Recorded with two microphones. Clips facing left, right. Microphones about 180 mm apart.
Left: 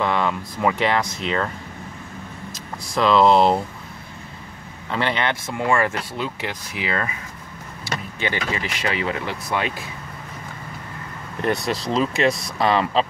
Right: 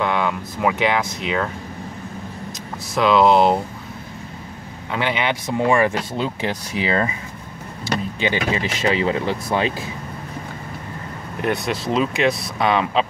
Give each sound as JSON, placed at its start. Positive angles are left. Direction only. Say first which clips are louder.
{"t": 0.0, "sound": "speech", "louder": "right 1 dB", "side_deg": 0}
{"t": 2.9, "sound": "speech", "louder": "right 1 dB", "side_deg": 0}
{"t": 4.9, "sound": "speech", "louder": "right 1 dB", "side_deg": -5}
{"t": 5.5, "sound": "speech", "louder": "right 5 dB", "side_deg": -20}
{"t": 8.2, "sound": "speech", "louder": "right 3 dB", "side_deg": -20}
{"t": 11.4, "sound": "speech", "louder": "right 1 dB", "side_deg": 0}